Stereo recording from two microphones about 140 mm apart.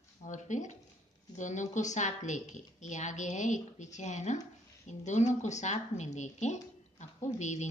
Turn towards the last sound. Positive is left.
turn(degrees=55)  # may be behind; listen again after turning